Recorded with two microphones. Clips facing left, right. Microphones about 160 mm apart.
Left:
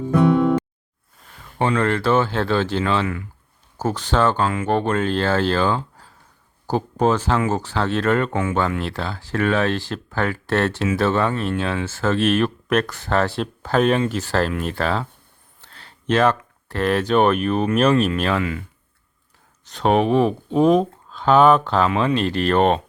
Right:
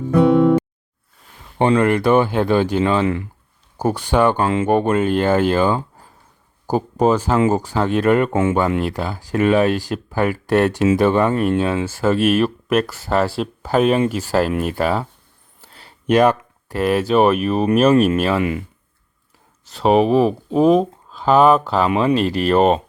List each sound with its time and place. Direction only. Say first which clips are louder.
1.5 s speech: right 5 dB; 20° right (ahead or behind)
8.3 s speech: right 5 dB; 25° right (ahead or behind)
8.5 s speech: right 4 dB; 10° right (ahead or behind)
18.3 s speech: right 4 dB; 20° right (ahead or behind)
19.6 s speech: right 3 dB; 5° right (ahead or behind)